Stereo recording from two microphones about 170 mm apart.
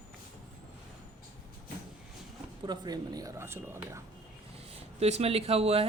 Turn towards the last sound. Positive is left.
turn(degrees=-35)  # may be behind; listen again after turning